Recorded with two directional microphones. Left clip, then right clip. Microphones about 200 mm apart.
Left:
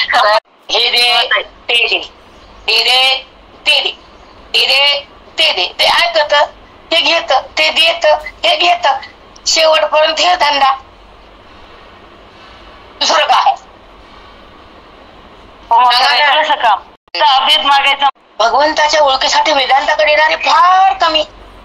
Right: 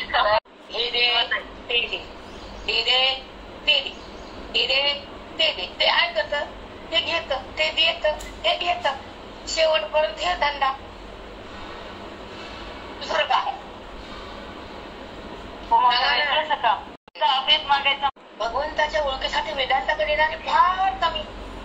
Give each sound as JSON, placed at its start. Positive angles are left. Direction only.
{"t": 0.1, "sound": "a sound", "side_deg": 55}
{"t": 2.6, "sound": "a woman's voice", "side_deg": 55}
{"t": 4.5, "sound": "a woman's voice", "side_deg": 55}
{"t": 13.0, "sound": "a woman's voice", "side_deg": 50}
{"t": 15.8, "sound": "a woman's voice", "side_deg": 55}